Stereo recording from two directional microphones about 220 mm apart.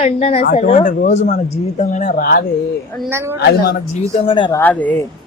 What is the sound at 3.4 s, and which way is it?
Speech, 45° left (ahead or behind).